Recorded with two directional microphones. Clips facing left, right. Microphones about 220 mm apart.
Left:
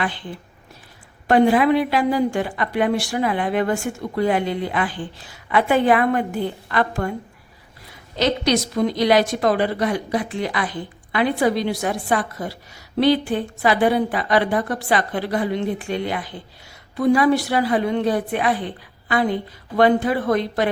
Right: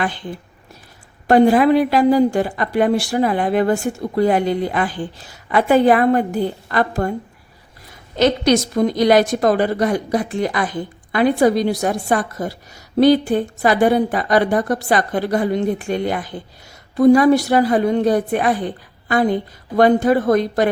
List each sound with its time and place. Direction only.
1.3 s a woman's voice: 40° right (ahead or behind)
8.2 s a woman's voice: 50° right (ahead or behind)